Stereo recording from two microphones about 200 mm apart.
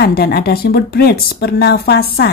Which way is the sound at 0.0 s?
50° left (ahead or behind).